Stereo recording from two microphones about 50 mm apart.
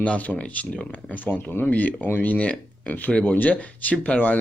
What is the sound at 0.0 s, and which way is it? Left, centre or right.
Speech, left.